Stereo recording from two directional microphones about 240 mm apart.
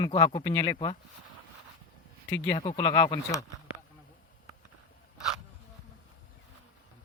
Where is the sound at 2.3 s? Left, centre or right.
Left.